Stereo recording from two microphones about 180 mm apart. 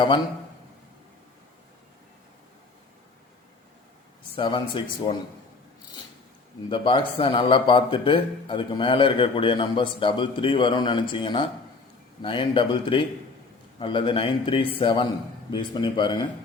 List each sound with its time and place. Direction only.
4.4 s a man's voice: 30° left (ahead or behind)
6.7 s a man's voice: 25° left (ahead or behind)